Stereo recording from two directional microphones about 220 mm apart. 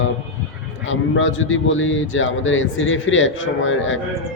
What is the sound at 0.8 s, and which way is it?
A man's voice, 60° left (ahead or behind).